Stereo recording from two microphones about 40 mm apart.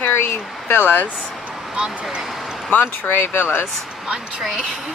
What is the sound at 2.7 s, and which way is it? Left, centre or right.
Speech, left.